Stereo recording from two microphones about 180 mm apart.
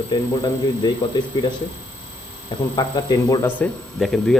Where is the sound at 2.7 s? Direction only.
25° left (ahead or behind).